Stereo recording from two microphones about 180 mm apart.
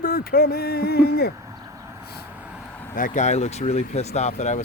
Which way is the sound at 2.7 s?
10° left (ahead or behind).